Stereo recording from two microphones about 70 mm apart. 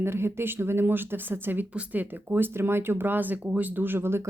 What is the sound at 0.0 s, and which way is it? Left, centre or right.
Speech, right.